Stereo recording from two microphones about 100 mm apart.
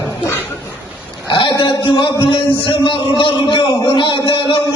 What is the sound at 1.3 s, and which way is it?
A man's voice, 55° left (ahead or behind).